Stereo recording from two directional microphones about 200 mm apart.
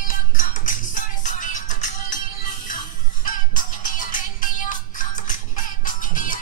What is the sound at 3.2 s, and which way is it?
Music, 40° left (ahead or behind).